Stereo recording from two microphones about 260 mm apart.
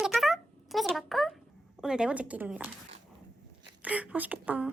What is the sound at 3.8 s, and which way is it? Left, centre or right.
Speech, centre.